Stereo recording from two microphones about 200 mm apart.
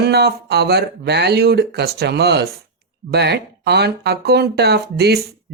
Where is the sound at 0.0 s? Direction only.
55° right (ahead or behind).